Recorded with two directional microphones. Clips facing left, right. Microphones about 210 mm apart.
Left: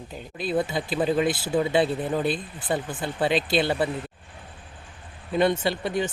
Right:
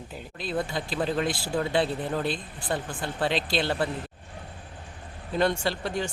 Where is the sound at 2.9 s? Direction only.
20° left (ahead or behind).